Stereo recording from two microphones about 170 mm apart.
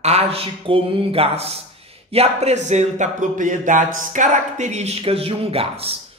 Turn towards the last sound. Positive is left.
turn(degrees=-35)  # may be behind; listen again after turning